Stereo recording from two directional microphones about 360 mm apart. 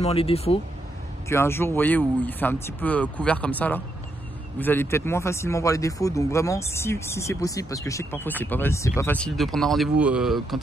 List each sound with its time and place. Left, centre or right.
0.0 s speech: centre